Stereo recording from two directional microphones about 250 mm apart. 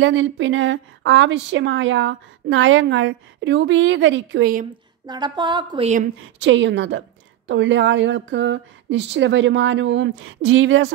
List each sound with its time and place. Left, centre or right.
0.0 s speech: right
5.0 s speech: centre
6.4 s speech: right